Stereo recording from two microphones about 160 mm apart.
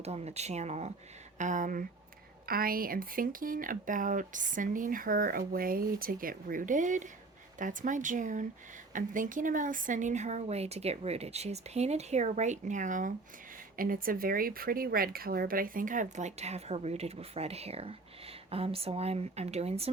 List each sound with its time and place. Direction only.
0.0 s speech: 40° right (ahead or behind)
2.5 s speech: 65° right (ahead or behind); by 19.9 s 40° right (ahead or behind)